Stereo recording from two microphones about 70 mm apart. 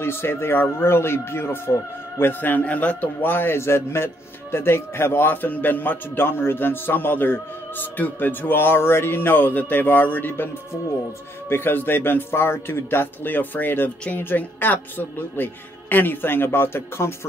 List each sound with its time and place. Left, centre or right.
0.0 s speech: left